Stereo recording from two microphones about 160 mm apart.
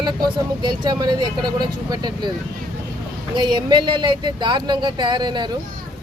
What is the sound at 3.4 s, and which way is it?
Speech, 25° right (ahead or behind).